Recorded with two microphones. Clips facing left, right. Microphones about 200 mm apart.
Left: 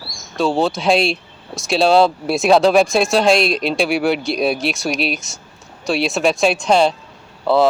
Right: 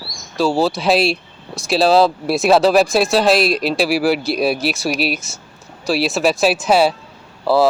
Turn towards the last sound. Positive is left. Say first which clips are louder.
# even
turn(degrees=-5)  # may be behind; listen again after turning